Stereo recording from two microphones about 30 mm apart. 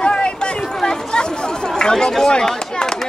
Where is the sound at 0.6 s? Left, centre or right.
Centre.